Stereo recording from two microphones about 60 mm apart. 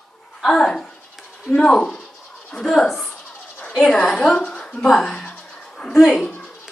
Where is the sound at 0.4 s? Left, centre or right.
Centre.